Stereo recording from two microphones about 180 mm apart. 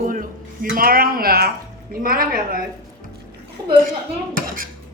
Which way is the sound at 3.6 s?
20° right (ahead or behind).